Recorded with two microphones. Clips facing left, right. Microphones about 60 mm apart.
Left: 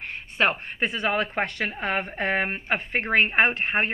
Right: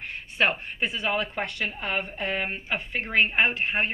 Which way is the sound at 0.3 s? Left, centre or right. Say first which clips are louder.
Left 1 dB; left.